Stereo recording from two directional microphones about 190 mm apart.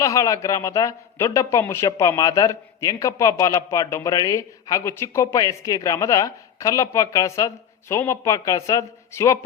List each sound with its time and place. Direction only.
0.0 s a man's voice: 15° left (ahead or behind)